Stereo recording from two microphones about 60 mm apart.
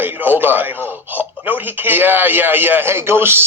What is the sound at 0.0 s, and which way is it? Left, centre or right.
A man's voice, right.